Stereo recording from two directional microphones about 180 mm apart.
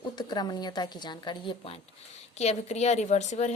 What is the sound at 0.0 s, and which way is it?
A woman's voice, 25° left (ahead or behind).